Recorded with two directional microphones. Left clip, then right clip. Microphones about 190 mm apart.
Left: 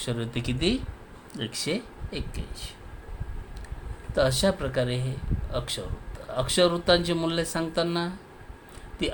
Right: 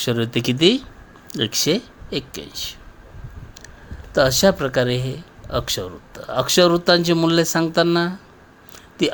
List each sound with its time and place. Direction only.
0.0 s a man's voice: 40° right (ahead or behind)
4.1 s a man's voice: 40° right (ahead or behind)